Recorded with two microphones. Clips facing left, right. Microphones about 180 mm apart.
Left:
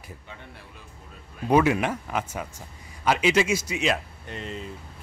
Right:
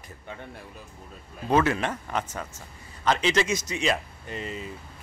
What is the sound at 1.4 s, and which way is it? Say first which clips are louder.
Speech: left 3 dB; 15° left (ahead or behind).